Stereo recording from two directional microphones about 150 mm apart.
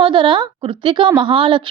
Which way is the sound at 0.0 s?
35° right (ahead or behind).